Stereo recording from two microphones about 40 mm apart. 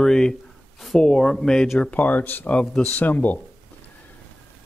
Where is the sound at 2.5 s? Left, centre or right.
Left.